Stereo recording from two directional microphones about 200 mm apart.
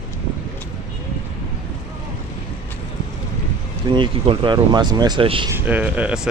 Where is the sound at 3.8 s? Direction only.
25° right (ahead or behind).